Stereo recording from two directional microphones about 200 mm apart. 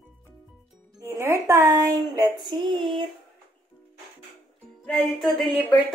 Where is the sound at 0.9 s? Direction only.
15° right (ahead or behind).